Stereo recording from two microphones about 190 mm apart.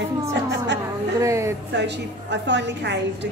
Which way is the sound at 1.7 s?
65° right (ahead or behind).